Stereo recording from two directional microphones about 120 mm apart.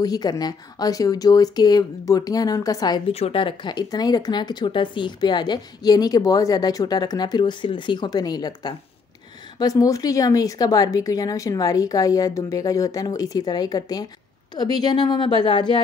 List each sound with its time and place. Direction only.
0.0 s speech: 30° left (ahead or behind)
3.1 s a woman's voice: 55° left (ahead or behind)
3.7 s speech: 35° left (ahead or behind)